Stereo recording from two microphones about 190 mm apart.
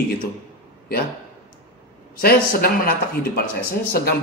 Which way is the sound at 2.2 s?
50° left (ahead or behind).